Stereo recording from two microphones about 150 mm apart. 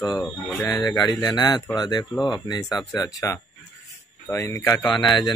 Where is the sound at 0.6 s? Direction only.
20° left (ahead or behind).